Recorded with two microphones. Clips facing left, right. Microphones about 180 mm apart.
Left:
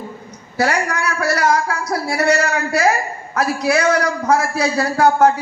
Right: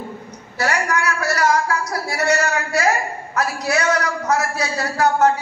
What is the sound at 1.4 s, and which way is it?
A man's voice, 30° left (ahead or behind).